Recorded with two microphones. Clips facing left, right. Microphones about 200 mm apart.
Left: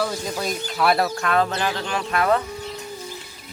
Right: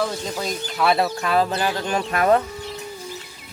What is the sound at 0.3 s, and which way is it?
Speech, centre (ahead or behind).